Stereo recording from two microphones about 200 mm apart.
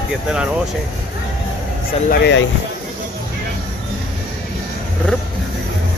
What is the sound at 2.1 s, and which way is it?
Speech, 60° left (ahead or behind).